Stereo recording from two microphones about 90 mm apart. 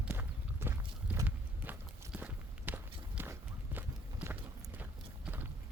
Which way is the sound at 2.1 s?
20° right (ahead or behind).